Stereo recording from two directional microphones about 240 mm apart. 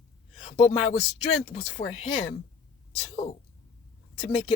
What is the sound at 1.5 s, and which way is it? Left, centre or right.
Speech, left.